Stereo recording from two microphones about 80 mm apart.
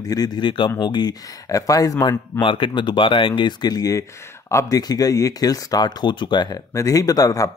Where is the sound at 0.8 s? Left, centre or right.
Left.